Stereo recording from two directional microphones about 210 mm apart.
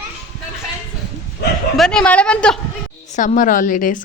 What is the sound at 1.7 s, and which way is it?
Speech, 5° left (ahead or behind).